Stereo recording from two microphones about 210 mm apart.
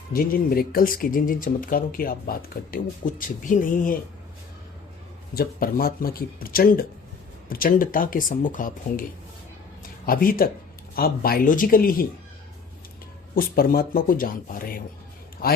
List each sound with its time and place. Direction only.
0.1 s speech: 45° left (ahead or behind)
5.3 s speech: 45° left (ahead or behind)
10.1 s speech: 45° left (ahead or behind)
13.3 s speech: 45° left (ahead or behind)